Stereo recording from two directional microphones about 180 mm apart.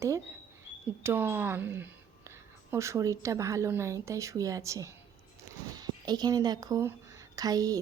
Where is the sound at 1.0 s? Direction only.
10° right (ahead or behind).